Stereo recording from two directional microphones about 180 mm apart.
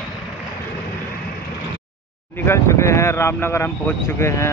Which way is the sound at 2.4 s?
15° left (ahead or behind).